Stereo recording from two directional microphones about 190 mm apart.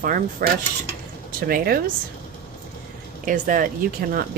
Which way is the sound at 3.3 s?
45° right (ahead or behind).